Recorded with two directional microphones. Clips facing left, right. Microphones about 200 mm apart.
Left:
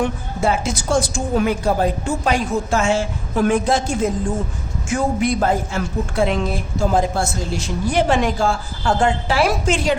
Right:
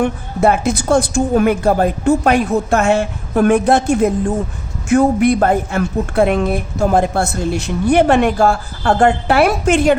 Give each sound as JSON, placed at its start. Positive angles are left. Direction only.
{"t": 0.0, "sound": "speech", "side_deg": -60}